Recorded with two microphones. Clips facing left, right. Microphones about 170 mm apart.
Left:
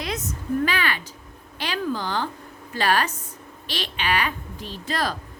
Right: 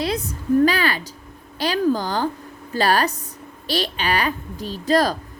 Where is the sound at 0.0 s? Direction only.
30° right (ahead or behind).